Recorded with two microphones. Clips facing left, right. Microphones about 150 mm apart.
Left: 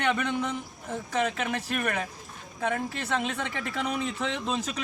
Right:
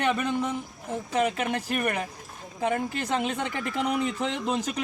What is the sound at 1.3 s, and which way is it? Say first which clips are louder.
Speech: right 2 dB; 45° right (ahead or behind).